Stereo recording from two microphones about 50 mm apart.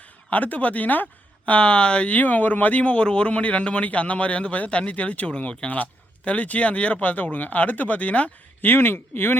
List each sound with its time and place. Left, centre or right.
0.3 s speech: left
8.6 s speech: left